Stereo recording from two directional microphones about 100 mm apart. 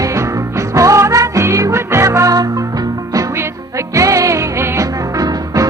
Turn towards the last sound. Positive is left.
turn(degrees=-35)  # may be behind; listen again after turning